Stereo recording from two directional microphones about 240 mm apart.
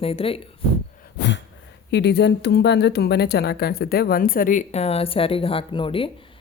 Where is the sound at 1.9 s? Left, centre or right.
Left.